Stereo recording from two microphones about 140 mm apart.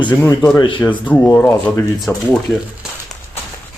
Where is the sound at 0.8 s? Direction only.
10° left (ahead or behind).